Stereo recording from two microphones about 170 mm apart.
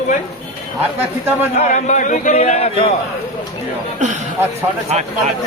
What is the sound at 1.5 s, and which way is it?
A man's voice, 45° left (ahead or behind).